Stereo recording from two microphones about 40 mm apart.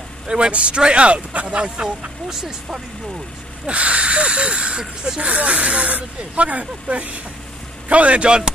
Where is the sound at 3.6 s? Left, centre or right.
Right.